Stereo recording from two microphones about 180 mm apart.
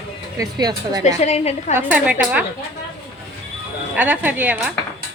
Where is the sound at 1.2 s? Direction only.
40° left (ahead or behind).